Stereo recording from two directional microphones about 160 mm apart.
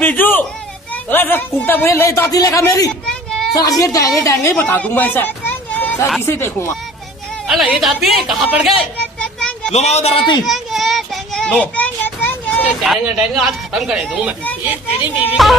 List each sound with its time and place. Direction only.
0.0 s a sound: 10° left (ahead or behind)
1.0 s a man's voice: 10° left (ahead or behind)
2.9 s children playing: 5° left (ahead or behind)
3.5 s a woman's voice: 20° left (ahead or behind)
7.4 s speech: 5° right (ahead or behind)
9.2 s children playing: 5° left (ahead or behind)
9.7 s speech: 40° left (ahead or behind)
10.4 s child singing: centre (ahead or behind)
12.8 s speech: centre (ahead or behind)
15.4 s speech: centre (ahead or behind)